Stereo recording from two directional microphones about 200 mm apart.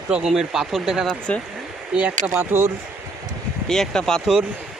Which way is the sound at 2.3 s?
10° right (ahead or behind).